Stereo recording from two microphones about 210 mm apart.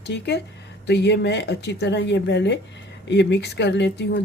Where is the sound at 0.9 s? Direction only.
55° left (ahead or behind).